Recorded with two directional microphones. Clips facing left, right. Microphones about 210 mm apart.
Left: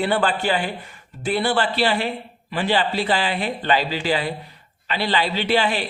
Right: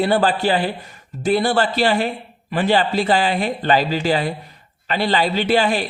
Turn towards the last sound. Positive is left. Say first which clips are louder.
# right 3 dB
turn(degrees=-45)  # may be behind; listen again after turning